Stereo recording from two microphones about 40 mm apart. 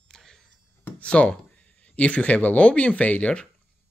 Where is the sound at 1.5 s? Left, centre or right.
Left.